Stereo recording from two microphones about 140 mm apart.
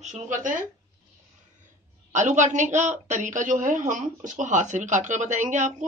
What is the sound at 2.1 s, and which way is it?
Speech, 60° right (ahead or behind).